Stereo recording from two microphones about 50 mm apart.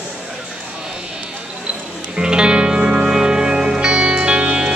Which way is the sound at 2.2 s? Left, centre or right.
Centre.